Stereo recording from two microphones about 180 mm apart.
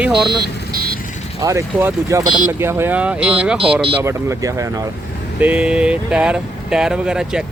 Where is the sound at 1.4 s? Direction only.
15° right (ahead or behind).